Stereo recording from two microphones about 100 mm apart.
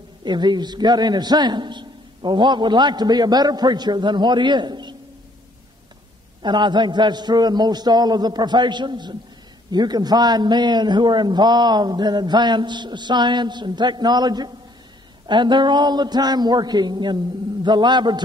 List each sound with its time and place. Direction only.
0.2 s a man's voice: 45° right (ahead or behind)
6.4 s a man's voice: 50° right (ahead or behind)